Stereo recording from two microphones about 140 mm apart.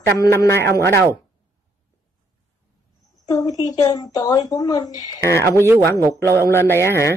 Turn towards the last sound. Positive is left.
turn(degrees=20)  # may be behind; listen again after turning